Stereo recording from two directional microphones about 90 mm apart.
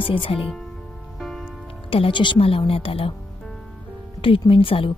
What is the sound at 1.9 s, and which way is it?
Speech, 80° left.